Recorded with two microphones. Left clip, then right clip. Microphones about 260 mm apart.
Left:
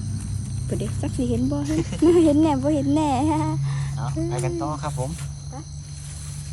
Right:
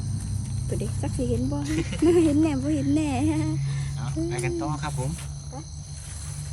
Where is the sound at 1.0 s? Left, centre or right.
Left.